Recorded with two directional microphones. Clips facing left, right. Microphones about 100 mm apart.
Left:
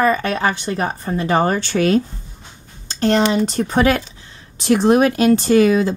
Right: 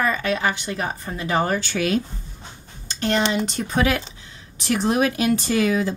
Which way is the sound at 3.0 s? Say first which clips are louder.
Left 6 dB; 35° left (ahead or behind).